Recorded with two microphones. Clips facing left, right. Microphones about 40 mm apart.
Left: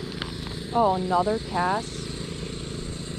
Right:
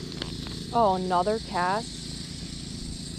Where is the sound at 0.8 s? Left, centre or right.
Left.